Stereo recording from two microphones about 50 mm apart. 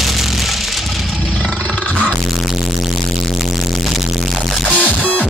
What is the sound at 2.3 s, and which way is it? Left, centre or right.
Music, centre.